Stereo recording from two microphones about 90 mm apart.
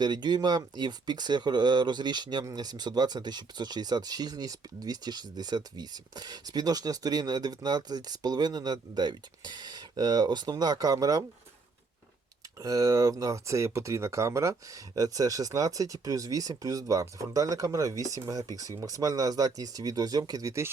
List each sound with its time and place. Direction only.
0.0 s speech: 50° right (ahead or behind)
12.5 s speech: 40° right (ahead or behind)